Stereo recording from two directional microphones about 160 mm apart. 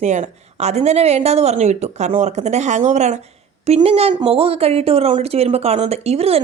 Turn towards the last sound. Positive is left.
turn(degrees=-40)  # may be behind; listen again after turning